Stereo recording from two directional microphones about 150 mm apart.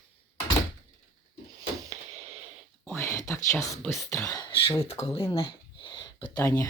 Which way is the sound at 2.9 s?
15° left (ahead or behind).